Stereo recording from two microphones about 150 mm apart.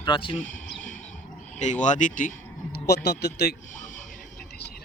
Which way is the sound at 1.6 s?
55° left (ahead or behind).